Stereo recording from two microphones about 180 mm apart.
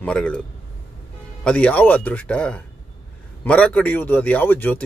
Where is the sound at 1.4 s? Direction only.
5° left (ahead or behind).